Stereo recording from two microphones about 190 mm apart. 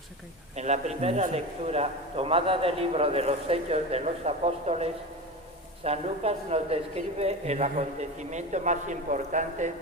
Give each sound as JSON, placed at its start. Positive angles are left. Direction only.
{"t": 0.5, "sound": "a man's voice", "side_deg": -35}